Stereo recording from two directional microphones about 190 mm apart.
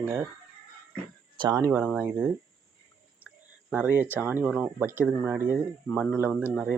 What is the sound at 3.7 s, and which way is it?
Speech, 10° right (ahead or behind).